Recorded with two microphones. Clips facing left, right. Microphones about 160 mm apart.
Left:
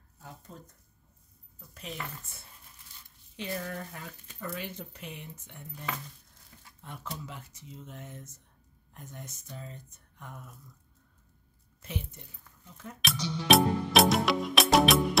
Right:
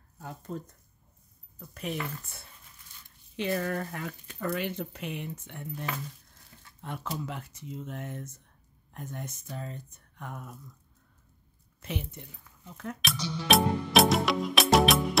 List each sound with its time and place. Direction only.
0.5 s speech: 75° right (ahead or behind)
1.7 s speech: 60° right (ahead or behind)
12.6 s speech: 70° right (ahead or behind)
13.0 s music: centre (ahead or behind)